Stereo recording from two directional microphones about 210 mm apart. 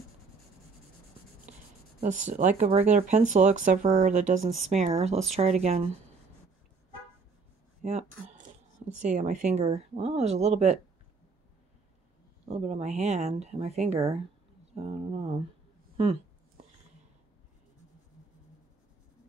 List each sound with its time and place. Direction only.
2.0 s speech: 35° right (ahead or behind)
7.8 s speech: 30° right (ahead or behind)
12.4 s speech: 30° right (ahead or behind)
16.0 s a sound: 30° right (ahead or behind)